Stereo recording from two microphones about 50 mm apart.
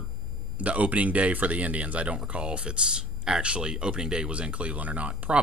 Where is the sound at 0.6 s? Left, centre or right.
Right.